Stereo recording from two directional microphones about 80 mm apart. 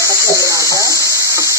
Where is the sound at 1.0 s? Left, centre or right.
Left.